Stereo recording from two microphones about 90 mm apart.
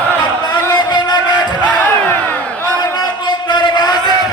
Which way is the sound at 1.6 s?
20° left (ahead or behind).